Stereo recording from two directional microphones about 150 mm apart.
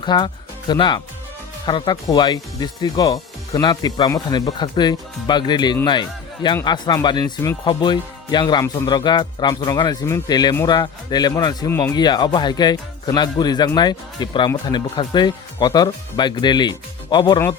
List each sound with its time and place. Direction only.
0.0 s speech: 30° left (ahead or behind)